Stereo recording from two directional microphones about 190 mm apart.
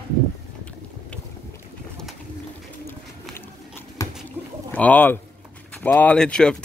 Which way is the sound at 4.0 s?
15° left (ahead or behind).